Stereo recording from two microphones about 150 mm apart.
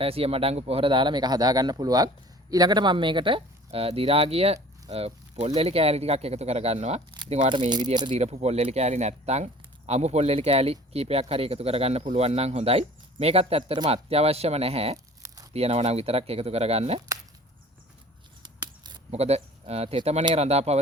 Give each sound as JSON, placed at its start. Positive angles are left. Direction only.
{"t": 0.0, "sound": "speech", "side_deg": -40}
{"t": 8.1, "sound": "speech", "side_deg": -45}
{"t": 14.9, "sound": "tearing", "side_deg": -20}
{"t": 15.5, "sound": "speech", "side_deg": -45}
{"t": 18.4, "sound": "a sound", "side_deg": -30}
{"t": 19.1, "sound": "speech", "side_deg": -45}